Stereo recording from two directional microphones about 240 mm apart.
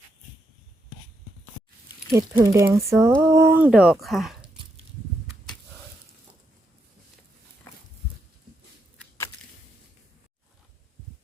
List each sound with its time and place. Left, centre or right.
2.1 s speech: centre